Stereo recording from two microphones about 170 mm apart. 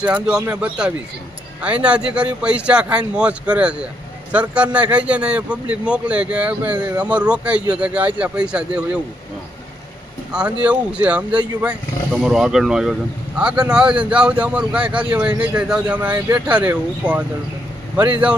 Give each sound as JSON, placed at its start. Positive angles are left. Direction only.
{"t": 0.0, "sound": "a man's voice", "side_deg": -5}
{"t": 10.3, "sound": "a man's voice", "side_deg": -5}